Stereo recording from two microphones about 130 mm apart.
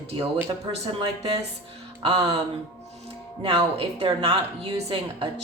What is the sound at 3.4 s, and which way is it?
A woman's voice, 45° right (ahead or behind).